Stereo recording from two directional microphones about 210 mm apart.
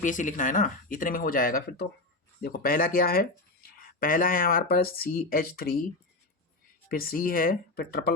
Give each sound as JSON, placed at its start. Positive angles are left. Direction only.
{"t": 0.0, "sound": "speech", "side_deg": 40}
{"t": 6.8, "sound": "speech", "side_deg": 45}